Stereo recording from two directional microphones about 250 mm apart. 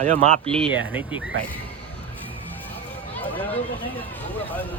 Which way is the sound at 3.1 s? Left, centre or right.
Centre.